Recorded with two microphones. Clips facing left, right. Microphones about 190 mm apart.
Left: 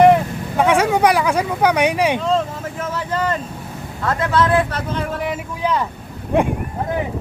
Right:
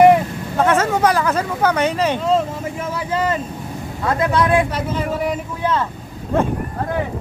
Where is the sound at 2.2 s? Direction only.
10° right (ahead or behind).